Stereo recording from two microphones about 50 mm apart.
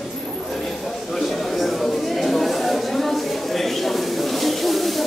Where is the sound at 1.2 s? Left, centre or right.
Centre.